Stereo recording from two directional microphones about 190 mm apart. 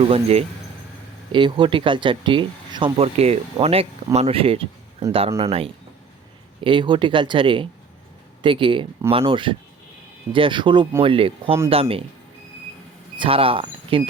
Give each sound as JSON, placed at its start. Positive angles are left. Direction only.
{"t": 0.1, "sound": "speech", "side_deg": -35}
{"t": 13.1, "sound": "speech", "side_deg": -30}